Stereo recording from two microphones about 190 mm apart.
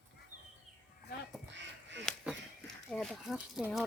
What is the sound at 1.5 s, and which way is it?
Crow, 70° right (ahead or behind).